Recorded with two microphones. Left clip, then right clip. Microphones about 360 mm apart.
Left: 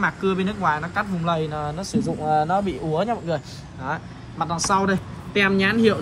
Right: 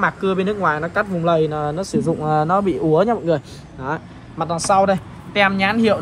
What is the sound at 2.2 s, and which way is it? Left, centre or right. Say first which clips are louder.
Speech: right 2 dB; right.